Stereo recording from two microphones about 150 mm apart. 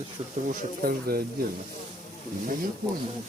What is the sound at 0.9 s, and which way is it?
Speech, 80° right.